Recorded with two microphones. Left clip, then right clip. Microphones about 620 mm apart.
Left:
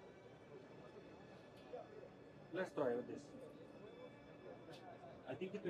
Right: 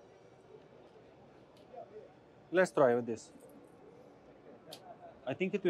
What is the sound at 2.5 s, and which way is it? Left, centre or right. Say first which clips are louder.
Speech: right 14 dB; right.